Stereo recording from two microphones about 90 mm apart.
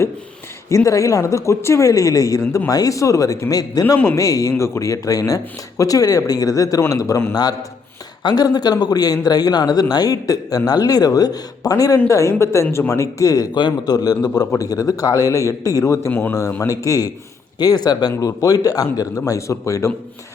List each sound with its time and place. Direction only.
0.9 s speech: 40° left (ahead or behind)
2.4 s speech: 30° left (ahead or behind)
2.6 s speech: 40° left (ahead or behind)
8.2 s a man's voice: 50° left (ahead or behind); by 19.9 s 35° left (ahead or behind)